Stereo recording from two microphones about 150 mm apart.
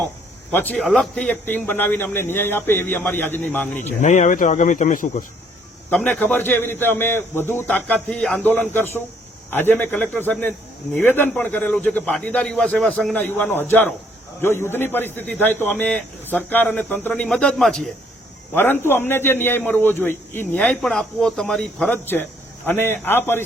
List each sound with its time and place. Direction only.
0.5 s a man's voice: 10° left (ahead or behind)
4.0 s speech: 55° left (ahead or behind)
5.9 s a man's voice: 10° left (ahead or behind)